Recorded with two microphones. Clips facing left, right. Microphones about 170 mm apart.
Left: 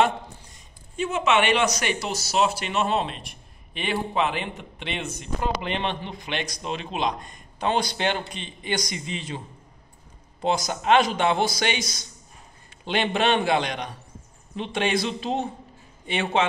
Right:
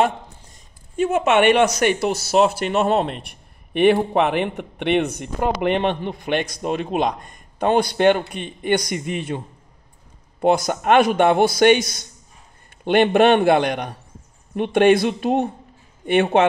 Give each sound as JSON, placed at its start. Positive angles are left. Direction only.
{"t": 0.9, "sound": "speech", "side_deg": -50}
{"t": 10.4, "sound": "speech", "side_deg": -55}